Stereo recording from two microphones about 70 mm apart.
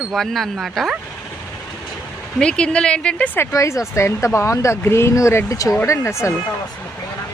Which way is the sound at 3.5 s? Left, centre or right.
Left.